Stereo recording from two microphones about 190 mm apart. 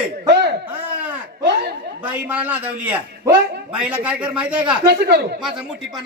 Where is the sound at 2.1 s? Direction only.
5° right (ahead or behind).